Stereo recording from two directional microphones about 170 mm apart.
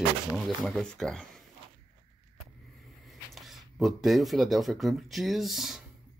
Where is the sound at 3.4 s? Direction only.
Centre (ahead or behind).